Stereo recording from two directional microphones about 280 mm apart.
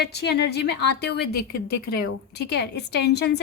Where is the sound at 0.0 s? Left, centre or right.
Left.